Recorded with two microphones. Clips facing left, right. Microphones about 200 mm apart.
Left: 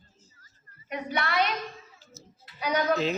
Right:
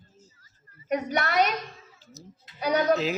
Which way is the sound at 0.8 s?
45° right (ahead or behind).